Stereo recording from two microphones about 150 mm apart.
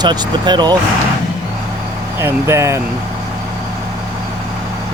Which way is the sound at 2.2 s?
15° right (ahead or behind).